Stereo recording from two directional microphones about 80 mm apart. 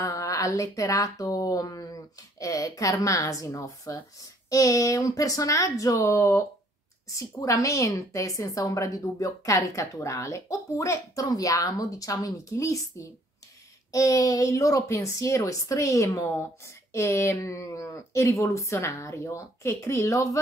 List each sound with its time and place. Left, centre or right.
0.0 s speech: left